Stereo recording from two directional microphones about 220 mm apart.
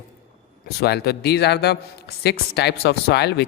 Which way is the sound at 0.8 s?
45° left (ahead or behind).